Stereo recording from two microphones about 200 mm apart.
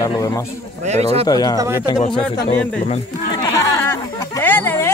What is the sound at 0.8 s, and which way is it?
Speech, 35° right (ahead or behind).